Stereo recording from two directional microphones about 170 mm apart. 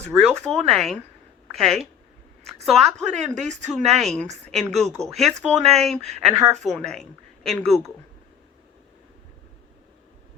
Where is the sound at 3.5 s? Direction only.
45° right (ahead or behind).